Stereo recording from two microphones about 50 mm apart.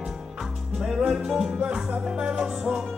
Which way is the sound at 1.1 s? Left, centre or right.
Centre.